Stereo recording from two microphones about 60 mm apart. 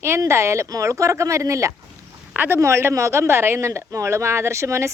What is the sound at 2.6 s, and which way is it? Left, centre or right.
Speech, right.